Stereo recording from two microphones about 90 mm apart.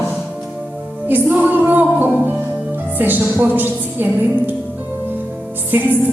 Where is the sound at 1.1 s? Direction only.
20° right (ahead or behind).